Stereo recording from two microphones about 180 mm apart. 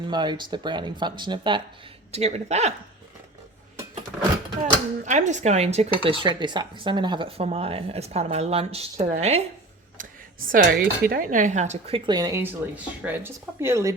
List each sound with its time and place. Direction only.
0.1 s dishes: 25° right (ahead or behind)
2.1 s speech: 35° right (ahead or behind)
4.6 s speech: 40° right (ahead or behind)
6.2 s speech: 25° right (ahead or behind)
10.0 s a sound: 45° right (ahead or behind)
10.5 s dishes: 55° right (ahead or behind); by 13.9 s 15° right (ahead or behind)